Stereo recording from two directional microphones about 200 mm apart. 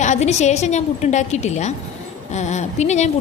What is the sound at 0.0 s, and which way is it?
A woman's voice, 35° left (ahead or behind).